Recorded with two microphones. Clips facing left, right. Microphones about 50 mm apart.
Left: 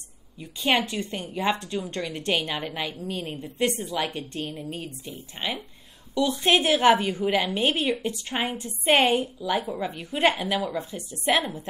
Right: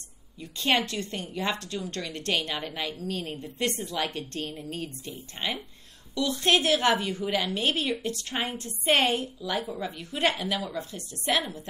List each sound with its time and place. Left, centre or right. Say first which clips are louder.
0.4 s a woman's voice: left 2 dB; centre
6.1 s a woman's voice: left 3 dB; centre